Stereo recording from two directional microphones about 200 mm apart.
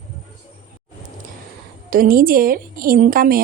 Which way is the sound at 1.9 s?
45° right (ahead or behind).